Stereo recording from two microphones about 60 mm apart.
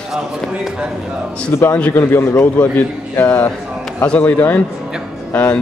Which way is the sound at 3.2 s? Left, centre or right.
Left.